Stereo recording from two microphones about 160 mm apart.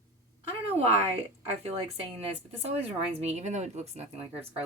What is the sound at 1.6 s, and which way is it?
Speech, 40° right (ahead or behind).